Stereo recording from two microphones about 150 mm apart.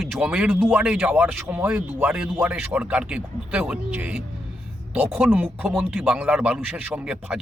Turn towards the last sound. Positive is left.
turn(degrees=-5)  # may be behind; listen again after turning